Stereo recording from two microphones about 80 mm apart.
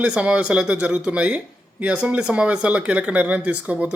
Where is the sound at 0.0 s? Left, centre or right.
Centre.